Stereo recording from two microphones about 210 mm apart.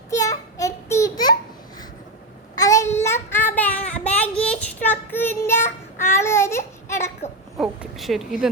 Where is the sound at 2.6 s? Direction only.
15° left (ahead or behind).